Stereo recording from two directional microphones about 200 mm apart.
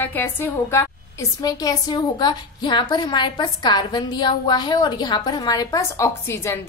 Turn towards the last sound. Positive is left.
turn(degrees=10)  # may be behind; listen again after turning